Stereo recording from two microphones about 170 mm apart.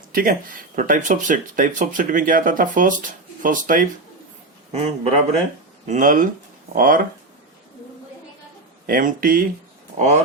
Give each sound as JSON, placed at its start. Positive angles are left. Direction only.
{"t": 0.1, "sound": "speech", "side_deg": -55}
{"t": 4.7, "sound": "a man's voice", "side_deg": -40}
{"t": 8.9, "sound": "speech", "side_deg": -55}